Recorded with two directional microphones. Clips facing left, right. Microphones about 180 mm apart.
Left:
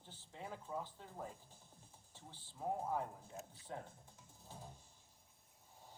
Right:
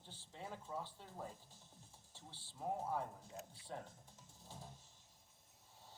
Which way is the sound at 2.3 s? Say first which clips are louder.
Left 1 dB; 85° right.